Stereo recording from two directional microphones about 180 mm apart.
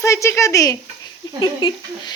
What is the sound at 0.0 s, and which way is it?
A child's voice, 15° left (ahead or behind).